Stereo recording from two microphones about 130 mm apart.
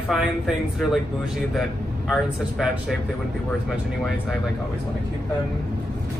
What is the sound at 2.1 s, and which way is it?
Speech, 5° right (ahead or behind).